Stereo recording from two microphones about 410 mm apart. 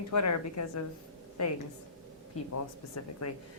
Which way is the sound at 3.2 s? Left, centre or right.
Left.